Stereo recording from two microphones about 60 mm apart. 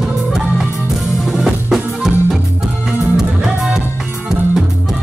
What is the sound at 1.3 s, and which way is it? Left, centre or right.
Drum kit, centre.